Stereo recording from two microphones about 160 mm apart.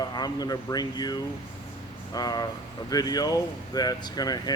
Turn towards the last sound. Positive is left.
turn(degrees=25)  # may be behind; listen again after turning